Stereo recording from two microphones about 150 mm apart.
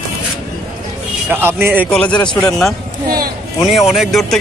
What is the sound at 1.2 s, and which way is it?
Speech, 15° right (ahead or behind).